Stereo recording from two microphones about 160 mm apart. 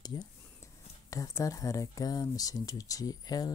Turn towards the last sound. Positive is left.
turn(degrees=25)  # may be behind; listen again after turning